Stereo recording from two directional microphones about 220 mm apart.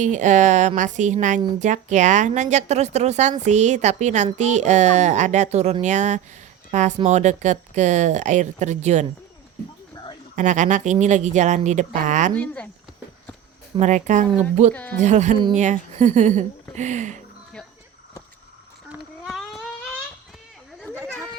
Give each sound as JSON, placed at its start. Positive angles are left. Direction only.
{"t": 0.0, "sound": "speech", "side_deg": -35}
{"t": 10.3, "sound": "speech", "side_deg": -35}
{"t": 13.7, "sound": "speech", "side_deg": -35}
{"t": 14.7, "sound": "speech", "side_deg": 5}
{"t": 15.0, "sound": "speech", "side_deg": -30}
{"t": 18.9, "sound": "a sound", "side_deg": 0}